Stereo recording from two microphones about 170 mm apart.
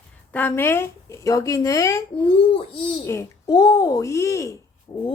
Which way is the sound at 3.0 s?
20° left (ahead or behind).